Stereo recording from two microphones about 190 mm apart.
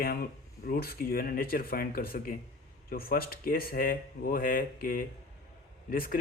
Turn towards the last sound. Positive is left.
turn(degrees=50)  # may be behind; listen again after turning